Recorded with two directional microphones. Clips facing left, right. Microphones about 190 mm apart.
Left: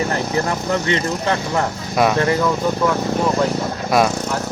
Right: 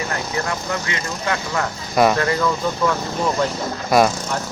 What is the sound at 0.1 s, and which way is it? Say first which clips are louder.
Speech: left 4 dB; 35° left (ahead or behind).